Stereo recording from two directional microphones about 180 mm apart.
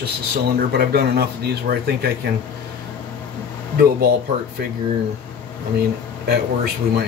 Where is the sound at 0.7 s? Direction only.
60° right (ahead or behind).